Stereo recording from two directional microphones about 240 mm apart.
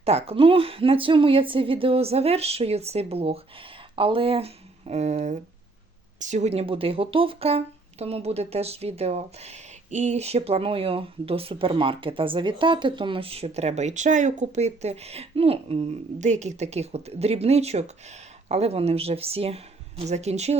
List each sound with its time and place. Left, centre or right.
0.0 s speech: right